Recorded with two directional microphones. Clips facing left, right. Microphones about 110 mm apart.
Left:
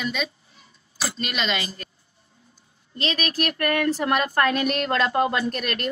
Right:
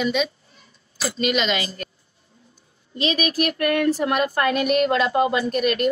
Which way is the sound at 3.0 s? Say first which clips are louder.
Right 4 dB; 15° right (ahead or behind).